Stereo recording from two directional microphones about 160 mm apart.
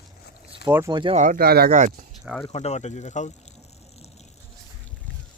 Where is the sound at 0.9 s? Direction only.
30° right (ahead or behind).